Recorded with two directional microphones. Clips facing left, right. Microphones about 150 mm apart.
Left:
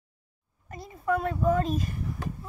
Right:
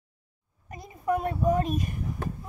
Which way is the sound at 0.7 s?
15° right (ahead or behind).